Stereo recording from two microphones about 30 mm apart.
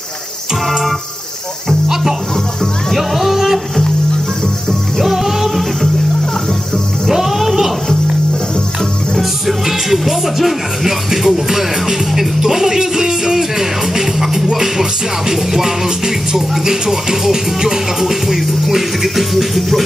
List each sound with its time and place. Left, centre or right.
2.9 s music: centre
5.0 s music: centre
7.1 s music: centre
9.5 s speech: centre
19.3 s music: centre